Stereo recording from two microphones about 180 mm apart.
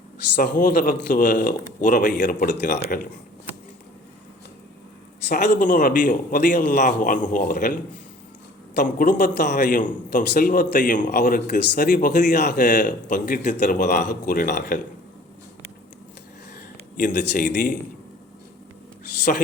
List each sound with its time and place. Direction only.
0.3 s a man's voice: 50° left (ahead or behind)
5.3 s speech: 65° left (ahead or behind)
5.5 s a man's voice: 45° left (ahead or behind)
17.2 s a man's voice: 50° left (ahead or behind)